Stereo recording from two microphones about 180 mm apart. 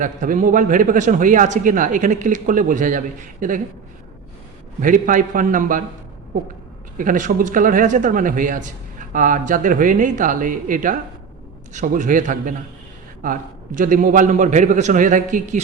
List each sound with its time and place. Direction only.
0.0 s a man's voice: 45° right (ahead or behind)
4.8 s a man's voice: 45° right (ahead or behind)
6.9 s a man's voice: 50° right (ahead or behind)